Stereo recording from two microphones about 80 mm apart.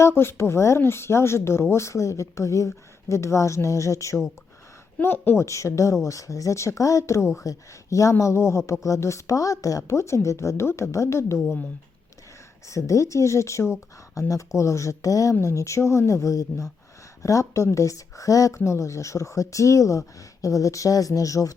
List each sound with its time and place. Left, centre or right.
0.0 s a woman's voice: left
4.9 s a woman's voice: left
12.6 s a woman's voice: left